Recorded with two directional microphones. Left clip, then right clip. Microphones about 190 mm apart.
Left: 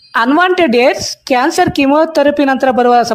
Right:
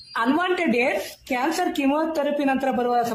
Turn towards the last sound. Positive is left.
turn(degrees=50)  # may be behind; listen again after turning